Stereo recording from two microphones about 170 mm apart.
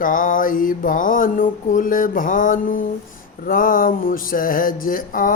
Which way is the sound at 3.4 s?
55° left (ahead or behind).